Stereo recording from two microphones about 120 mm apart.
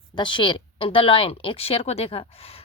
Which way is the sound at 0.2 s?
40° left (ahead or behind).